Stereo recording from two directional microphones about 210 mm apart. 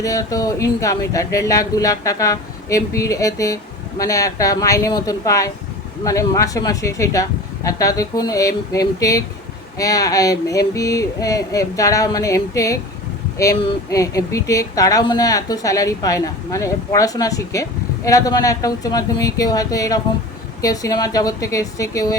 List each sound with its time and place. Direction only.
0.0 s a woman's voice: 15° left (ahead or behind)